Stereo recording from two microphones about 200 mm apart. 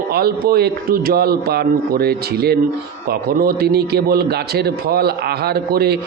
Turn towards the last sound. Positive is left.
turn(degrees=-50)  # may be behind; listen again after turning